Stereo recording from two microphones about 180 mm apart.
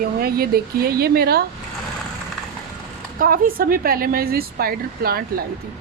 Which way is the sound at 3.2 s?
55° right (ahead or behind).